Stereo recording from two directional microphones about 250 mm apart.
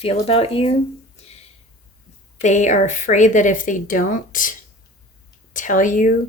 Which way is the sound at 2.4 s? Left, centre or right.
Left.